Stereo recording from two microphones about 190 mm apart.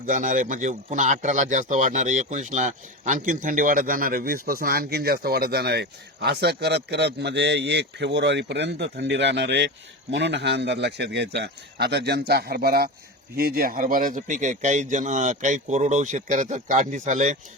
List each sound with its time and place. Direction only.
0.0 s speech: 45° right (ahead or behind)